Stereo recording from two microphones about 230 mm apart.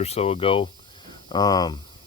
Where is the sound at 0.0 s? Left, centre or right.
Left.